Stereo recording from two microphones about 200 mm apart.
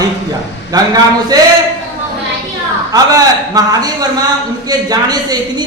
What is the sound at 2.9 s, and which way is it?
A man's voice, 20° right (ahead or behind).